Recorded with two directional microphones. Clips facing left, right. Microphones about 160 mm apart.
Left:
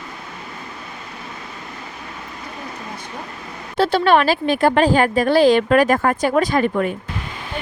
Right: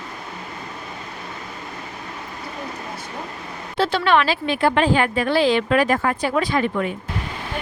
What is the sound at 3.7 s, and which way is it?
A woman's voice, 40° left (ahead or behind).